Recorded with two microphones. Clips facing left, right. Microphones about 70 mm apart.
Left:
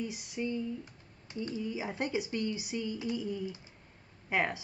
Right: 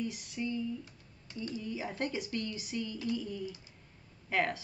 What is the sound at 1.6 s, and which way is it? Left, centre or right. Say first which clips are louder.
Speech: left 1 dB; centre.